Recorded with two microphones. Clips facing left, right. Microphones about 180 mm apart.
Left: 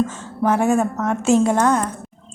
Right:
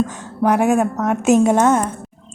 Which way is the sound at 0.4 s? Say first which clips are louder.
Right 2 dB; 15° right (ahead or behind).